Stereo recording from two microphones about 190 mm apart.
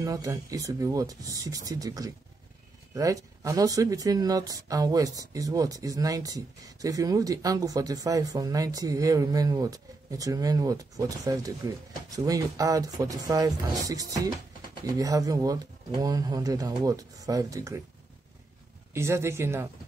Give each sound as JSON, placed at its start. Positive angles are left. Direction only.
{"t": 0.0, "sound": "speech", "side_deg": -20}
{"t": 18.9, "sound": "speech", "side_deg": -15}